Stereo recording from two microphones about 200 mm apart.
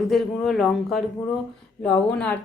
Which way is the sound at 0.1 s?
Centre (ahead or behind).